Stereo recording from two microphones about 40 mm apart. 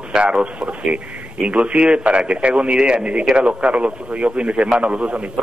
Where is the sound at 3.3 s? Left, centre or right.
Right.